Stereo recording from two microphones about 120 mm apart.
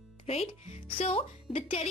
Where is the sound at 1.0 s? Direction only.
55° left (ahead or behind).